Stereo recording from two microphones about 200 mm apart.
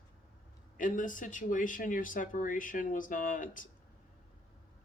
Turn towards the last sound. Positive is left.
turn(degrees=40)  # may be behind; listen again after turning